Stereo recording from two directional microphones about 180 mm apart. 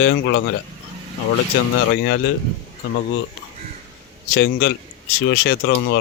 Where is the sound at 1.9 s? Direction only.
70° left (ahead or behind).